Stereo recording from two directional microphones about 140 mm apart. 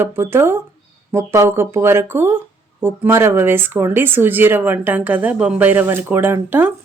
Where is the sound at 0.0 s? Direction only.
15° right (ahead or behind).